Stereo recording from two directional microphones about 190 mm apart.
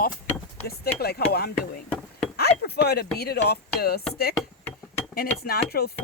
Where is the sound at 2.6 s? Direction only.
55° left (ahead or behind).